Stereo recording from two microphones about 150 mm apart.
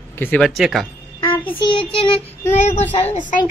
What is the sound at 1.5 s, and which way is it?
Child singing, 35° left (ahead or behind).